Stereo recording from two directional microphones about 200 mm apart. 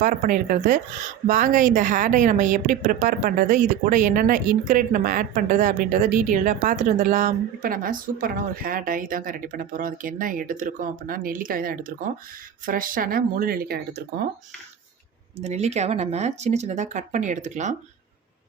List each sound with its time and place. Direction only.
0.0 s speech: 40° right (ahead or behind)
15.4 s speech: 30° right (ahead or behind)